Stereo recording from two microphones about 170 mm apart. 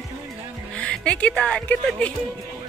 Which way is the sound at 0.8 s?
5° left (ahead or behind).